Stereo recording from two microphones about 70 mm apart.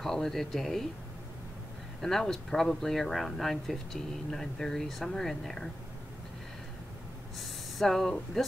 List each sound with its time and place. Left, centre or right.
0.0 s speech: centre
2.0 s speech: centre
7.3 s speech: centre